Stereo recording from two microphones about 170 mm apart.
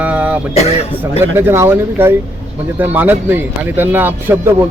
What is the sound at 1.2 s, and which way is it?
Speech, 15° right (ahead or behind).